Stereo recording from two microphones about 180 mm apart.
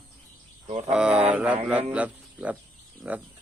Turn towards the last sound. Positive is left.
turn(degrees=-10)  # may be behind; listen again after turning